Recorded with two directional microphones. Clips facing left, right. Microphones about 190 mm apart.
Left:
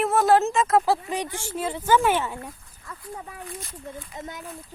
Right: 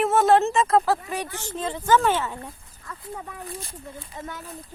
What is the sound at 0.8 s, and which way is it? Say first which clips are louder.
Speech: left 1 dB; 15° left (ahead or behind).